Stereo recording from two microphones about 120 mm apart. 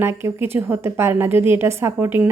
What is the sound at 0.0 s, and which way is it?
A woman's voice, 20° right (ahead or behind).